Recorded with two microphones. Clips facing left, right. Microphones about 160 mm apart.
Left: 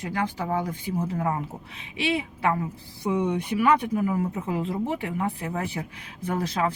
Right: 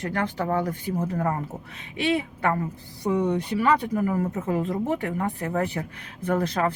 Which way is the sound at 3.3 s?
15° left (ahead or behind).